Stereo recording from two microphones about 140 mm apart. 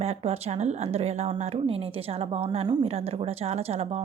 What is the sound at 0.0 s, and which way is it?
Speech, 45° right (ahead or behind).